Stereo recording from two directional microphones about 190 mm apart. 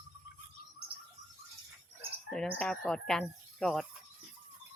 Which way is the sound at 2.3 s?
5° left (ahead or behind).